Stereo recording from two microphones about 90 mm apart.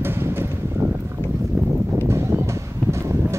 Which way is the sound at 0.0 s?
25° right (ahead or behind).